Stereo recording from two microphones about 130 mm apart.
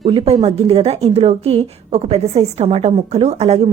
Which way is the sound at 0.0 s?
45° right (ahead or behind).